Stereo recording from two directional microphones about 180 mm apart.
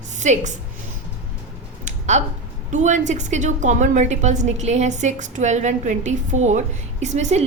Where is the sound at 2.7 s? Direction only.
40° right (ahead or behind).